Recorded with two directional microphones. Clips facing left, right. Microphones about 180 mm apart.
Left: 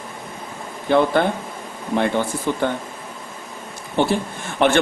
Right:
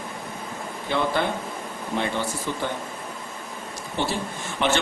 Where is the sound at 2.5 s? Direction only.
55° left (ahead or behind).